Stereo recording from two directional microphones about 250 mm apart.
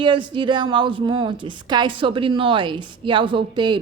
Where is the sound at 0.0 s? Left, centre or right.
Centre.